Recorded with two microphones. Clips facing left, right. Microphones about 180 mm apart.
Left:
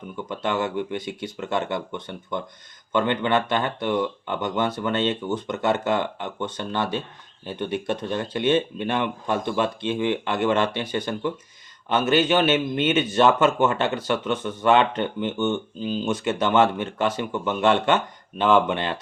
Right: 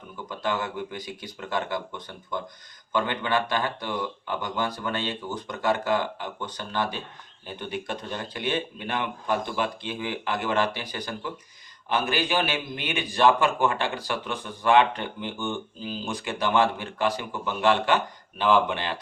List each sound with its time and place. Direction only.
0.3 s a man's voice: 25° left (ahead or behind)